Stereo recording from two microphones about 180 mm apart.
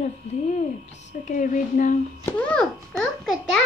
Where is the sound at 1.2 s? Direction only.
45° left (ahead or behind).